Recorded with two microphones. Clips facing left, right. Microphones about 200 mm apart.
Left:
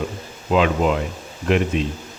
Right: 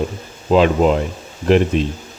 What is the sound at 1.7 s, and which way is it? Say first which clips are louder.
Speech: right 4 dB; centre (ahead or behind).